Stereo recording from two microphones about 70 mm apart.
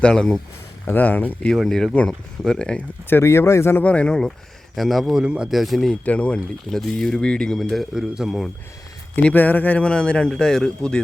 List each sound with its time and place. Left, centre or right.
0.0 s a man's voice: centre
0.9 s speech: left
1.5 s a man's voice: centre
3.1 s speech: left
3.8 s a man's voice: centre
4.7 s speech: centre
5.2 s speech: centre
5.5 s speech: centre
5.9 s a man's voice: centre
6.7 s a man's voice: centre
9.1 s a man's voice: left; by 11.0 s centre